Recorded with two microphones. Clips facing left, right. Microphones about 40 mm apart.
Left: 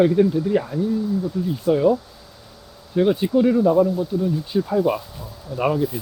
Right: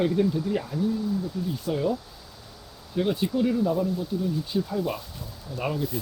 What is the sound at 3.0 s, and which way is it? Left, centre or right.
Speech, centre.